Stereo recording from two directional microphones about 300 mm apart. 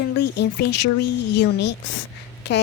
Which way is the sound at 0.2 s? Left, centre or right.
Left.